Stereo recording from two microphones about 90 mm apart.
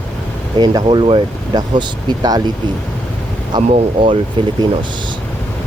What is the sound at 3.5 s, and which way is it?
Speech, 70° right (ahead or behind).